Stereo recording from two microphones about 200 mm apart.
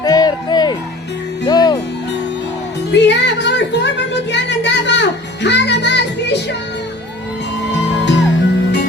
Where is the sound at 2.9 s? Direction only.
60° left (ahead or behind).